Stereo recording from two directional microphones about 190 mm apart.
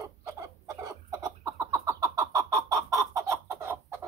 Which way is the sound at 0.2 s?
15° right (ahead or behind).